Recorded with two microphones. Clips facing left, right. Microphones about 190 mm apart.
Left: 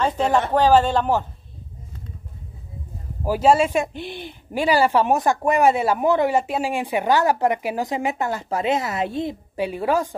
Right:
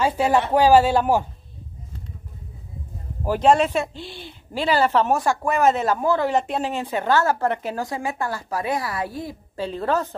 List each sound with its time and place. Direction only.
0.0 s speech: 10° right (ahead or behind)
3.3 s speech: 5° left (ahead or behind)
6.3 s speech: 5° left (ahead or behind); by 9.7 s 20° left (ahead or behind)
9.7 s speech: 10° left (ahead or behind)